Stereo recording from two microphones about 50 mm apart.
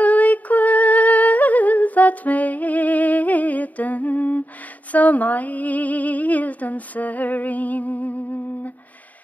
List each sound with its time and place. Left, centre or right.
0.0 s female singing: left
4.9 s speech: left